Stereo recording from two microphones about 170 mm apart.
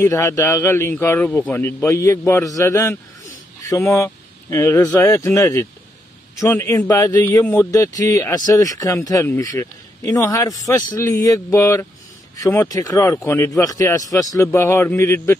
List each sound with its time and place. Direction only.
0.0 s a man's voice: 15° left (ahead or behind)